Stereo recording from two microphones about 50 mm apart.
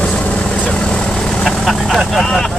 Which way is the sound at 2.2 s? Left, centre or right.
Centre.